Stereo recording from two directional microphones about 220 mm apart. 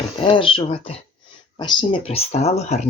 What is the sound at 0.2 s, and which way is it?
Speech, 25° left (ahead or behind).